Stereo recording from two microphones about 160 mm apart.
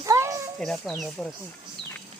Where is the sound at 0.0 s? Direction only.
20° right (ahead or behind).